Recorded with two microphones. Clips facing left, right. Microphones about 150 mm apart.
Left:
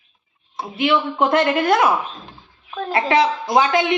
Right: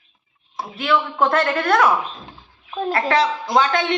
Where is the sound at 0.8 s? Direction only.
20° left (ahead or behind).